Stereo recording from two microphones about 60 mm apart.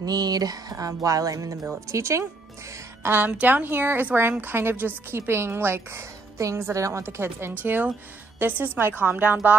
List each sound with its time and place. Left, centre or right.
0.0 s music: right
1.9 s speech: right
3.0 s a woman's voice: right
7.6 s speech: right